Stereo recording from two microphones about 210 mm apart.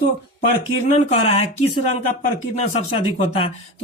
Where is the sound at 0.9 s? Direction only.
30° left (ahead or behind).